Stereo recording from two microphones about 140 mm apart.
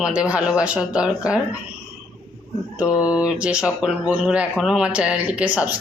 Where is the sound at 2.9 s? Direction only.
25° left (ahead or behind).